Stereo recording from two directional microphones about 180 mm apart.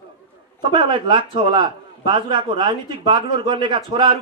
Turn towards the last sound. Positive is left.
turn(degrees=-25)  # may be behind; listen again after turning